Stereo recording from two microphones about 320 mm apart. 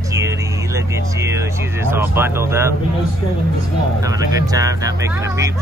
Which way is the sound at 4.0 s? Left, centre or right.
Centre.